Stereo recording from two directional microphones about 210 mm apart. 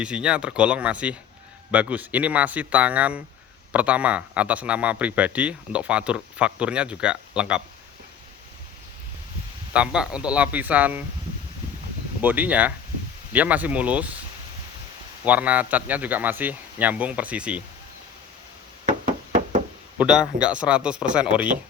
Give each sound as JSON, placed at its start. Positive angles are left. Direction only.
{"t": 0.0, "sound": "a man's voice", "side_deg": -5}
{"t": 9.7, "sound": "speech", "side_deg": -5}
{"t": 12.2, "sound": "speech", "side_deg": -10}
{"t": 15.2, "sound": "speech", "side_deg": -5}
{"t": 19.0, "sound": "knock", "side_deg": -35}
{"t": 20.0, "sound": "a man's voice", "side_deg": -5}